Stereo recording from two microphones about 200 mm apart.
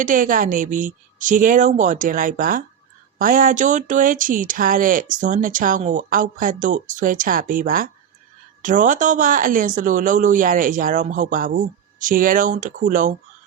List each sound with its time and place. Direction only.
0.0 s speech: 40° right (ahead or behind)